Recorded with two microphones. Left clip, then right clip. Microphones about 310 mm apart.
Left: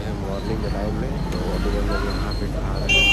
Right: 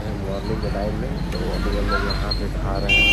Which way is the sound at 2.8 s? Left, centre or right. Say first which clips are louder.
Right 1 dB; left.